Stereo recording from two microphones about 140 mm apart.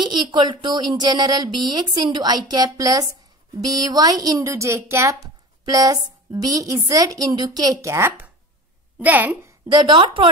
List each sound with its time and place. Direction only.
0.0 s a woman's voice: 30° right (ahead or behind); by 9.5 s 15° right (ahead or behind)
9.7 s a woman's voice: 35° right (ahead or behind)